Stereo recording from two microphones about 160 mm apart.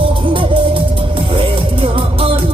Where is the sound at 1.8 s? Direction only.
35° right (ahead or behind).